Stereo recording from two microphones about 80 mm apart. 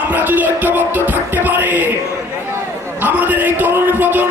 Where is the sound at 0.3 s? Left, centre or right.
Right.